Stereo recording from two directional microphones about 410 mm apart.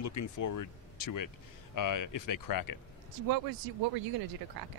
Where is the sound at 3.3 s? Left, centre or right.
Right.